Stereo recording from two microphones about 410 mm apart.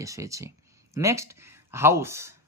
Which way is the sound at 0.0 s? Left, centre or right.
Centre.